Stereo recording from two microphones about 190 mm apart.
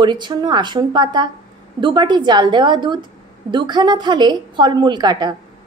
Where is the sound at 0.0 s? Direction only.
25° right (ahead or behind).